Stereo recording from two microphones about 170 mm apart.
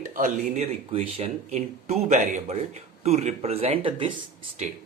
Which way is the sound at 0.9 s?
35° right (ahead or behind).